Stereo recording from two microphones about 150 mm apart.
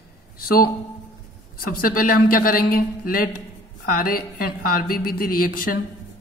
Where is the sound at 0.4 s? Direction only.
85° left.